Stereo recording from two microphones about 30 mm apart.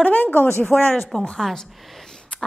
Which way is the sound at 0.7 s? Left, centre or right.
Left.